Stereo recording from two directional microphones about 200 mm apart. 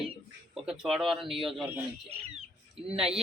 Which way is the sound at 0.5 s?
5° right (ahead or behind).